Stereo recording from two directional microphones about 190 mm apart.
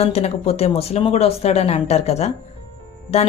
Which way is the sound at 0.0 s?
35° left (ahead or behind).